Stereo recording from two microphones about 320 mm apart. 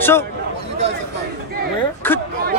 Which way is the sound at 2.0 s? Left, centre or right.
Centre.